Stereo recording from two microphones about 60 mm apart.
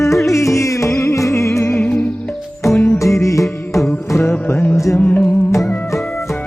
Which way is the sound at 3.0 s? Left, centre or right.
Left.